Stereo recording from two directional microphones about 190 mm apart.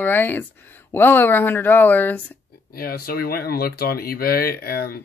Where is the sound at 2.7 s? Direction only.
50° left (ahead or behind).